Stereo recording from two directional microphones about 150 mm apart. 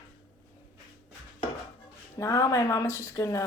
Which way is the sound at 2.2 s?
25° left (ahead or behind).